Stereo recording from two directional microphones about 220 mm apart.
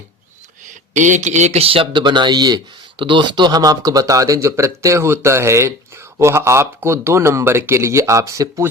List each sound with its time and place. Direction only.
0.7 s speech: 35° right (ahead or behind); by 8.6 s 15° right (ahead or behind)